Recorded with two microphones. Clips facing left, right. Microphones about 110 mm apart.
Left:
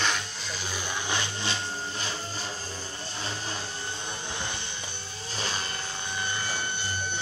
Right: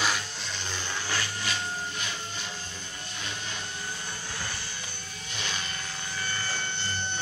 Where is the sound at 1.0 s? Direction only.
20° left (ahead or behind).